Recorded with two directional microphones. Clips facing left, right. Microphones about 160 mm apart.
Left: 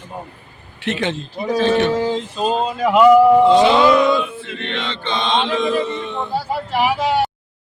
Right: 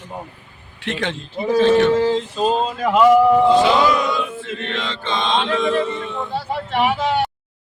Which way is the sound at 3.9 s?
55° left (ahead or behind).